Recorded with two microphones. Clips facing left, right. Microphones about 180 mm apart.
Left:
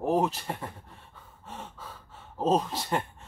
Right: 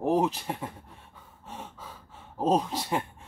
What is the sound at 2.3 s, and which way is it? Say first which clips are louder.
Speech: even; 15° right (ahead or behind).